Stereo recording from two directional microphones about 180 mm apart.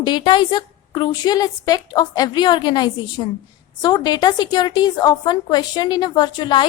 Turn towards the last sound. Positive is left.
turn(degrees=25)  # may be behind; listen again after turning